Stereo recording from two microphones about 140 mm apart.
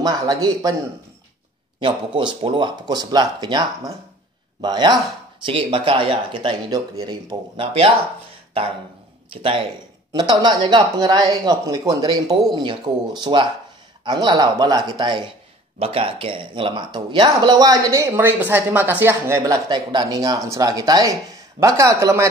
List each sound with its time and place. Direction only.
0.0 s speech: 30° right (ahead or behind)
1.8 s speech: 35° right (ahead or behind)
9.3 s speech: 40° right (ahead or behind); by 22.3 s 20° right (ahead or behind)